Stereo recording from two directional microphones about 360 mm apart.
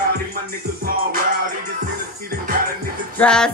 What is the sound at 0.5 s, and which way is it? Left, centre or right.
Music, right.